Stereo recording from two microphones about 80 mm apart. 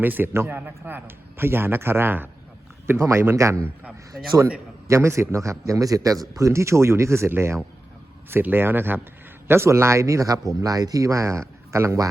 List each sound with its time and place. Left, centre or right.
0.0 s a man's voice: right
3.0 s a man's voice: right
4.9 s a man's voice: right